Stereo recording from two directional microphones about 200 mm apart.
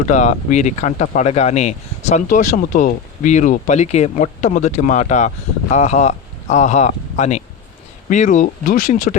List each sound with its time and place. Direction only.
0.0 s speech: 35° left (ahead or behind)